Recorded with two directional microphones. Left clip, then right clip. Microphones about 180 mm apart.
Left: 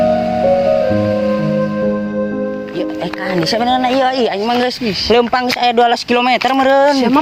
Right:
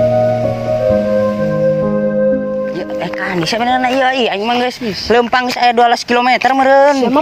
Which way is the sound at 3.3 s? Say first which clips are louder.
Left 1 dB; centre (ahead or behind).